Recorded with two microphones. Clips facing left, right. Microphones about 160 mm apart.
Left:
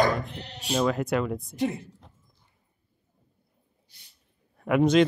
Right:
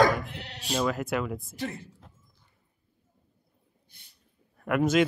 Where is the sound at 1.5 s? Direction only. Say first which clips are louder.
Left 10 dB; 20° left (ahead or behind).